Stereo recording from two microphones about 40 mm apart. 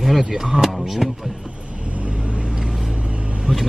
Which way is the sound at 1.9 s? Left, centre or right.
Right.